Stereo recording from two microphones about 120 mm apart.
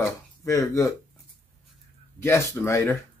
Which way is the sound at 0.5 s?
25° left (ahead or behind).